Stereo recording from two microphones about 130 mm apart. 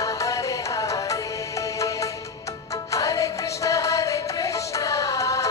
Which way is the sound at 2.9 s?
25° left (ahead or behind).